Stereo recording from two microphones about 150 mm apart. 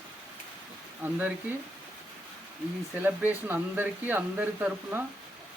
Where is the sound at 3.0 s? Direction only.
10° right (ahead or behind).